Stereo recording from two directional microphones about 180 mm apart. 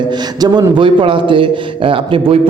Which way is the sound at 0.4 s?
25° right (ahead or behind).